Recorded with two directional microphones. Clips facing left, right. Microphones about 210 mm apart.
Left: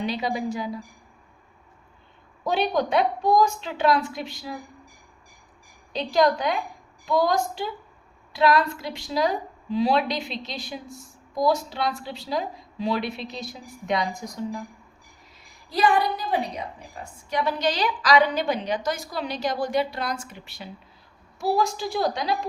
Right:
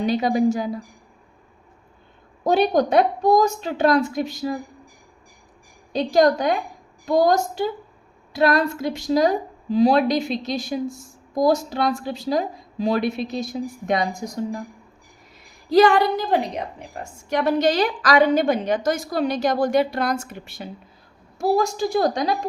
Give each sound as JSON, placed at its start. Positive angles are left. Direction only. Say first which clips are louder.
{"t": 0.0, "sound": "a woman's voice", "louder": "right 8 dB", "side_deg": -45}
{"t": 2.4, "sound": "a woman's voice", "louder": "right 6 dB", "side_deg": -45}
{"t": 5.9, "sound": "a woman's voice", "louder": "right 4 dB", "side_deg": -45}
{"t": 15.7, "sound": "a woman's voice", "louder": "right 7 dB", "side_deg": -85}
{"t": 17.0, "sound": "a woman's voice", "louder": "right 4 dB", "side_deg": -45}